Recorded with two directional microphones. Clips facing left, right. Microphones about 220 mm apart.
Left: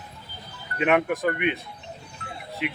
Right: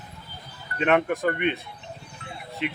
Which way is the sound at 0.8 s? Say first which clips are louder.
Even; 5° left (ahead or behind).